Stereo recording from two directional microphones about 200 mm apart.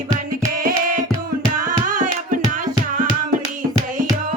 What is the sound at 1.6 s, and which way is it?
Music, 40° right (ahead or behind).